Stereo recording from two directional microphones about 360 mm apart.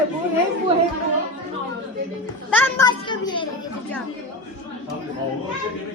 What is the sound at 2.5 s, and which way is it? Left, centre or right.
Speech, centre.